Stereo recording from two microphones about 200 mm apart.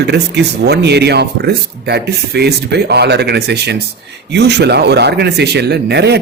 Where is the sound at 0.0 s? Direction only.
55° right (ahead or behind).